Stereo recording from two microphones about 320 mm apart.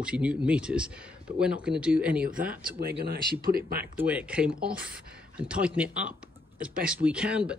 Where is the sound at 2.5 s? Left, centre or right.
Right.